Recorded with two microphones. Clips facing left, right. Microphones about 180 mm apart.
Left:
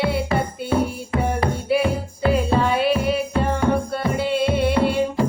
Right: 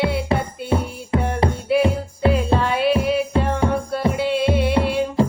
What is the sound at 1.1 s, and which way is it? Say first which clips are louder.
Music: right 2 dB; 30° right (ahead or behind).